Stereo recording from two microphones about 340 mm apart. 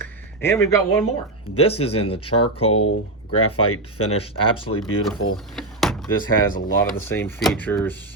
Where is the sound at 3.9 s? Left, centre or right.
Left.